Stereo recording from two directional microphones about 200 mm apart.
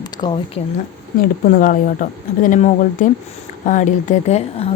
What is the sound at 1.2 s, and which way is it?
A woman's voice, 45° left (ahead or behind).